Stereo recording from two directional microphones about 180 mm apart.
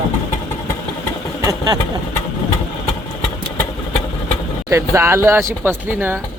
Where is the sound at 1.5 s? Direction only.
20° right (ahead or behind).